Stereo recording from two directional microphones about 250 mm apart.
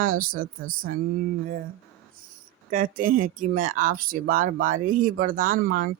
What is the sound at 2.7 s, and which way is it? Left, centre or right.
Speech, right.